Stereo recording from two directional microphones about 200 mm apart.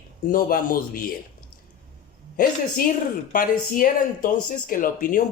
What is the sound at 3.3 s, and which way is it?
Speech, 45° left (ahead or behind).